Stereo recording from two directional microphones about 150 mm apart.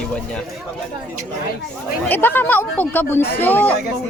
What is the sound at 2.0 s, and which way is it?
Speech, 15° left (ahead or behind).